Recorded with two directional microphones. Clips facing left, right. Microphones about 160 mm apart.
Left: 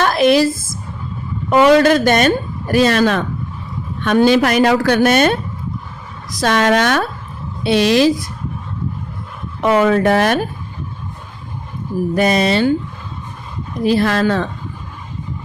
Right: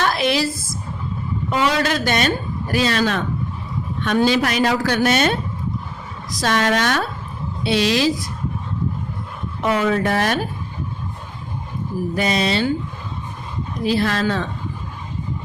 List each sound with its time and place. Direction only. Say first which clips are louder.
0.0 s a sound: left 7 dB; 50° left (ahead or behind)
1.5 s speech: left 10 dB; 55° left (ahead or behind)
6.4 s speech: left 5 dB; 55° left (ahead or behind)
9.6 s speech: left 6 dB; 60° left (ahead or behind)
12.1 s speech: left 6 dB; 50° left (ahead or behind)
13.8 s speech: left 5 dB; 50° left (ahead or behind)